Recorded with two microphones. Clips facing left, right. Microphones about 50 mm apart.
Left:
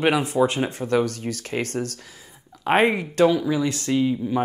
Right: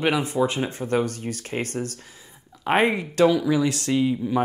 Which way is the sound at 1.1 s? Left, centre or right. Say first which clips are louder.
Left 2 dB; left.